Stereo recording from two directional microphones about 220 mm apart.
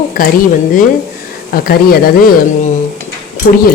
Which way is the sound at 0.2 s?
40° left (ahead or behind).